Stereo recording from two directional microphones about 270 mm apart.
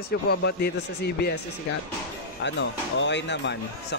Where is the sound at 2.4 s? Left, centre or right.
Left.